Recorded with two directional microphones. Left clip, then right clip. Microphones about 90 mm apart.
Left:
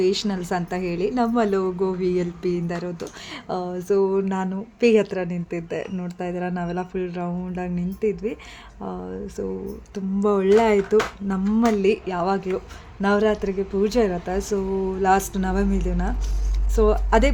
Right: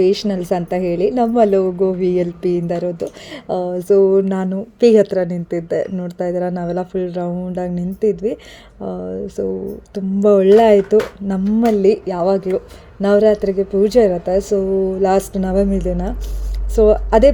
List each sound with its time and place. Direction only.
0.0 s a woman's voice: 35° right (ahead or behind)